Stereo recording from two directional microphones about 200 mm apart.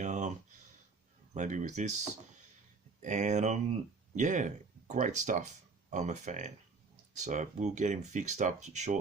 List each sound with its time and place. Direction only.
0.0 s a sound: 35° right (ahead or behind)
1.3 s speech: 40° right (ahead or behind)
3.0 s speech: 35° right (ahead or behind)